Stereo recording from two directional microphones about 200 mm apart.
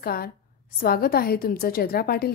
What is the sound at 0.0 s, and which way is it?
A woman's voice, 50° left (ahead or behind).